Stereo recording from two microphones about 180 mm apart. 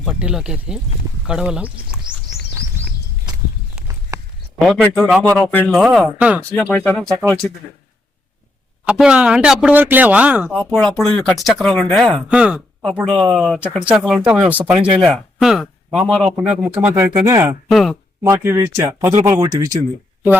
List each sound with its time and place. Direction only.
0.0 s speech: 5° right (ahead or behind)
4.1 s a sound: 20° right (ahead or behind)
4.6 s speech: centre (ahead or behind)
5.0 s speech: 10° right (ahead or behind)
5.5 s speech: 10° left (ahead or behind); by 6.4 s 5° right (ahead or behind)
6.6 s speech: 10° left (ahead or behind)
8.8 s speech: 5° right (ahead or behind)
17.7 s speech: centre (ahead or behind)
18.2 s speech: 15° right (ahead or behind)